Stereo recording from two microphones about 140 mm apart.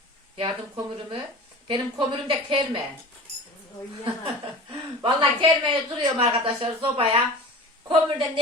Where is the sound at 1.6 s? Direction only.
35° right (ahead or behind).